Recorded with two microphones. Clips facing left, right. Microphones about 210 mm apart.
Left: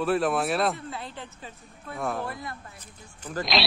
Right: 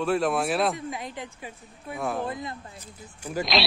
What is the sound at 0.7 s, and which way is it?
Speech, 15° right (ahead or behind).